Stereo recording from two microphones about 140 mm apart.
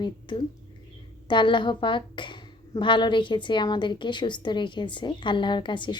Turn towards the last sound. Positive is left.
turn(degrees=35)  # may be behind; listen again after turning